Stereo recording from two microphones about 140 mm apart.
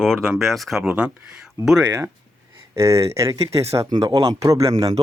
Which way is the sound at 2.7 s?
20° right (ahead or behind).